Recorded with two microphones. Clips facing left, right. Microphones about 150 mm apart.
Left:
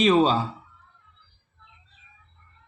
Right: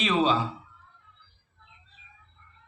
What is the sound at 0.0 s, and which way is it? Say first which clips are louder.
Speech: left 5 dB; 40° left (ahead or behind).